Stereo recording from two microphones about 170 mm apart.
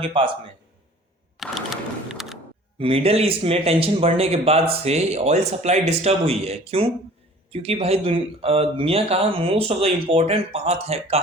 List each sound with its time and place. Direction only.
0.0 s speech: 30° right (ahead or behind)
1.4 s typing: centre (ahead or behind)
2.7 s speech: 35° right (ahead or behind)